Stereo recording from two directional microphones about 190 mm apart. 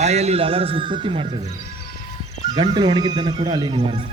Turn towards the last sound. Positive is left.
turn(degrees=-25)  # may be behind; listen again after turning